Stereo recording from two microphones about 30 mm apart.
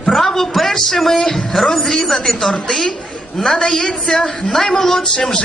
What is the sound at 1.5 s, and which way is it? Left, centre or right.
Speech, centre.